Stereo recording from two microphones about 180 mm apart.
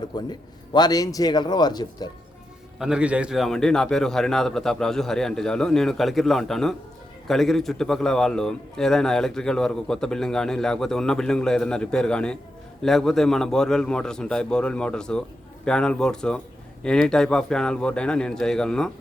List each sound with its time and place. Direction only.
0.1 s a man's voice: 25° left (ahead or behind)
2.7 s a man's voice: 5° right (ahead or behind)